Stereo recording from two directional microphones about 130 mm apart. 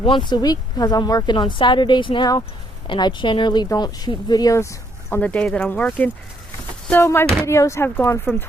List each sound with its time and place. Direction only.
0.0 s speech: 40° left (ahead or behind)
5.1 s speech: 10° left (ahead or behind)